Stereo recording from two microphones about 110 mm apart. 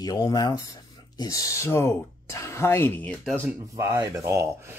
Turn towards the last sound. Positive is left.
turn(degrees=-30)  # may be behind; listen again after turning